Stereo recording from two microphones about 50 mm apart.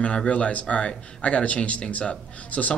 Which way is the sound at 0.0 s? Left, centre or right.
Left.